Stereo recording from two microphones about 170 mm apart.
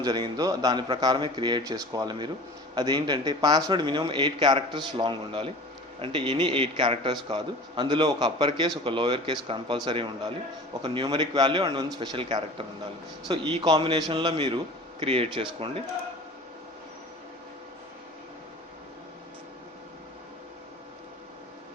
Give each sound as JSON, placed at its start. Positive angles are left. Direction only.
{"t": 0.0, "sound": "a man's voice", "side_deg": -25}